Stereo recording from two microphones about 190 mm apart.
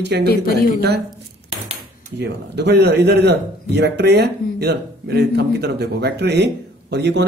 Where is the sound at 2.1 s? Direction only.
65° right (ahead or behind).